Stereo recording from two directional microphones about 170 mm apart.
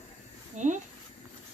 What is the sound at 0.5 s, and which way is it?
Speech, 45° right (ahead or behind).